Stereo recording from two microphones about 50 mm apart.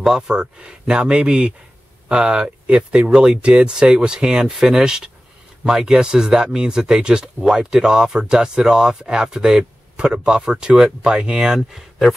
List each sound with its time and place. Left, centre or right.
0.0 s speech: centre
0.4 s speech: centre